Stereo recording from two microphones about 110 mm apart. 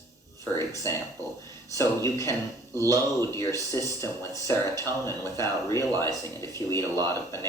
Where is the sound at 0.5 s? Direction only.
30° left (ahead or behind).